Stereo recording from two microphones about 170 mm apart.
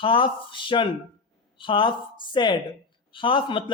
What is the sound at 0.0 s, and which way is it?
A man's voice, 30° left (ahead or behind).